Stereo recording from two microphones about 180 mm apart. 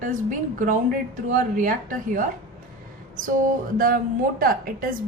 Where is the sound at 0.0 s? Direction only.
45° right (ahead or behind).